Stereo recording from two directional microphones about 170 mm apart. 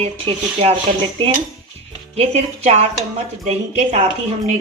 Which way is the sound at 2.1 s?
40° right (ahead or behind).